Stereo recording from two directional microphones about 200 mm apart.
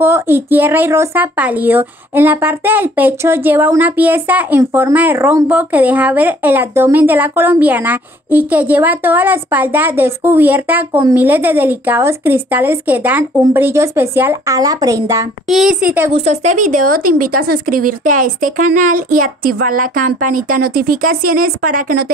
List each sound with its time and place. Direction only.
0.0 s speech: 10° right (ahead or behind)
15.5 s speech: 5° right (ahead or behind)
16.1 s speech: 35° right (ahead or behind)